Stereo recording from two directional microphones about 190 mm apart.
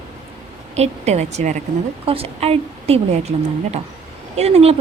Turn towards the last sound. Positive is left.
turn(degrees=-30)  # may be behind; listen again after turning